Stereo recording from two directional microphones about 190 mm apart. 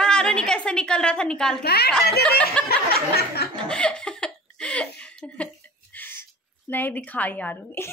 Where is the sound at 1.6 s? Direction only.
55° left (ahead or behind).